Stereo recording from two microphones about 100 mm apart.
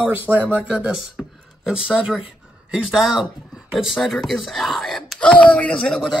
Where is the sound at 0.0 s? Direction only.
10° right (ahead or behind).